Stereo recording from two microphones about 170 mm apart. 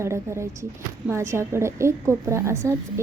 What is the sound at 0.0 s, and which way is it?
Speech, 15° right (ahead or behind).